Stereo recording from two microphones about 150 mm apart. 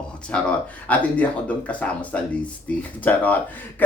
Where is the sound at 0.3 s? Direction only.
5° left (ahead or behind).